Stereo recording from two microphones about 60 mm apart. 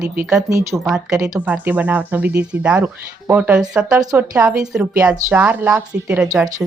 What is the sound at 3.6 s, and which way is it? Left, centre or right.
Speech, centre.